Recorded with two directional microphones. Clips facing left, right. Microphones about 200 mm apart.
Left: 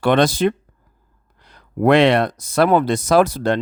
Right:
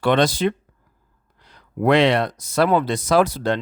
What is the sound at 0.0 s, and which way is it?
Speech, 50° left (ahead or behind).